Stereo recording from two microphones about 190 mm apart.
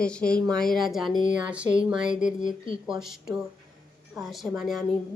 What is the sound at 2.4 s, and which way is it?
Speech, 45° left (ahead or behind).